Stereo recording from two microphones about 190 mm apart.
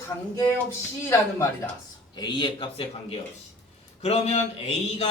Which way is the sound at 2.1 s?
25° left (ahead or behind).